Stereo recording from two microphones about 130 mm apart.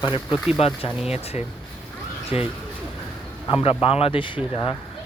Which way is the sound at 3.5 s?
45° left (ahead or behind).